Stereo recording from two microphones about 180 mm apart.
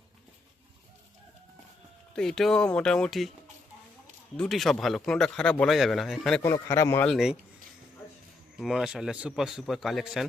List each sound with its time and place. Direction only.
2.1 s speech: centre (ahead or behind)
4.4 s speech: centre (ahead or behind)
6.4 s a man's voice: 15° left (ahead or behind)
7.1 s speech: centre (ahead or behind)
8.5 s speech: centre (ahead or behind)